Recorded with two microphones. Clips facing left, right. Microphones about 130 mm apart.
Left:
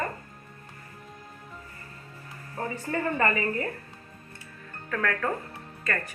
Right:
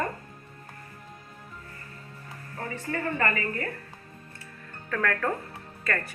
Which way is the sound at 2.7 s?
35° left (ahead or behind).